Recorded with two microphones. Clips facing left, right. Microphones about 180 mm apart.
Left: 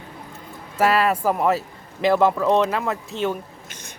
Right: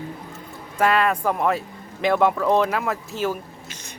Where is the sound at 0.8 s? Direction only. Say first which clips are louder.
Left 1 dB; 5° left (ahead or behind).